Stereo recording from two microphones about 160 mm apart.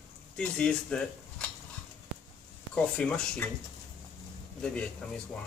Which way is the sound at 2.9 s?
5° left (ahead or behind).